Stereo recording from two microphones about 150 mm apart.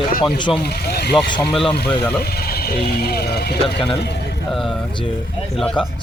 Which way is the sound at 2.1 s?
90° left.